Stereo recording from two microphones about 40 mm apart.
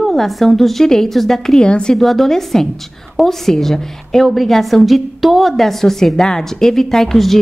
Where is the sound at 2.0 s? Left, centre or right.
Centre.